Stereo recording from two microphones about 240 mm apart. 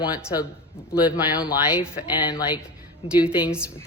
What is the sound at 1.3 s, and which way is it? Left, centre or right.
Speech, centre.